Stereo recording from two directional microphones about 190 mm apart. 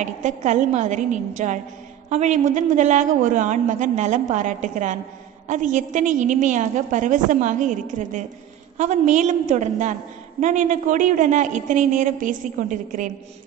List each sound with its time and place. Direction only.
0.0 s a woman's voice: 40° right (ahead or behind)